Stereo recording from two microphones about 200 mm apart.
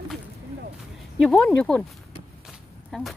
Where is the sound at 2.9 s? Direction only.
Centre (ahead or behind).